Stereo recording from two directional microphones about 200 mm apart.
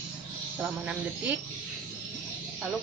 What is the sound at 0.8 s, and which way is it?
Speech, 5° right (ahead or behind).